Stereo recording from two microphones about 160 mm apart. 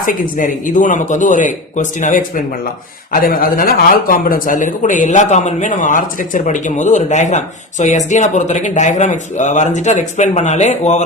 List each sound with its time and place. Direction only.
0.0 s speech: 55° left (ahead or behind)
3.1 s speech: 65° left (ahead or behind); by 11.0 s 45° left (ahead or behind)